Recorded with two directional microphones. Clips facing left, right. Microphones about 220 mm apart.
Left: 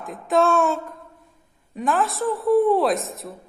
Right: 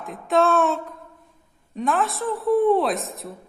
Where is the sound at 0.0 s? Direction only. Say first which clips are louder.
Even; centre (ahead or behind).